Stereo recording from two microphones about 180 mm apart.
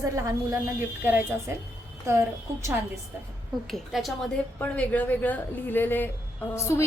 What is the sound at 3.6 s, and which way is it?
A woman's voice, centre (ahead or behind).